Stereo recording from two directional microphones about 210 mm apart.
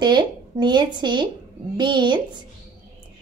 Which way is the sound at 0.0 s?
20° right (ahead or behind).